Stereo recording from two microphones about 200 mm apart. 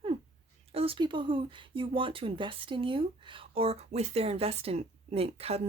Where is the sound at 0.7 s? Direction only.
30° right (ahead or behind).